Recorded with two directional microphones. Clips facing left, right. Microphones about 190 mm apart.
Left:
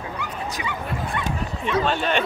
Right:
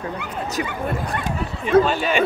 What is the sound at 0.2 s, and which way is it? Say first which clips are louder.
Speech: right 4 dB; 50° right (ahead or behind).